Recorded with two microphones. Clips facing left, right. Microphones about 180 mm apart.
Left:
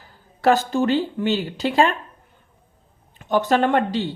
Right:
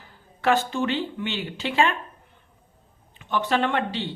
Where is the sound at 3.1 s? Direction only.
40° left (ahead or behind).